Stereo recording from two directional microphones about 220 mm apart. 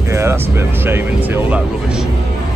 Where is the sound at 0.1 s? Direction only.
10° right (ahead or behind).